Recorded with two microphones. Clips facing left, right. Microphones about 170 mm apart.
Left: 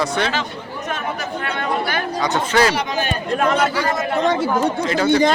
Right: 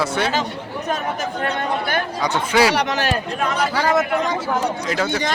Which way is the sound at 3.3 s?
50° left (ahead or behind).